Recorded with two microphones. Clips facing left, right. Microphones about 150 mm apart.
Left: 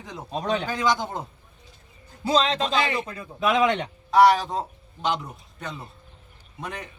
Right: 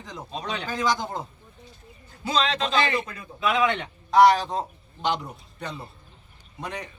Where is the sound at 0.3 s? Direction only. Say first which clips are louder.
Left 7 dB; 50° left (ahead or behind).